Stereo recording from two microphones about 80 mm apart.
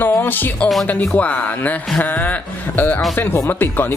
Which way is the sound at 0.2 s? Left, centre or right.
Left.